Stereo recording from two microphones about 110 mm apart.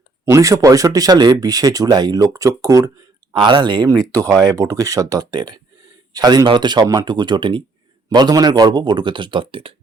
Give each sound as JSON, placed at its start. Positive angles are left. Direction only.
{"t": 0.3, "sound": "speech", "side_deg": -30}
{"t": 3.3, "sound": "speech", "side_deg": -45}
{"t": 3.8, "sound": "speech", "side_deg": -30}